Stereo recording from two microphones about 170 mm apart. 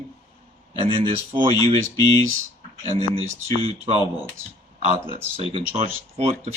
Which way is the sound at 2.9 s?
35° right (ahead or behind).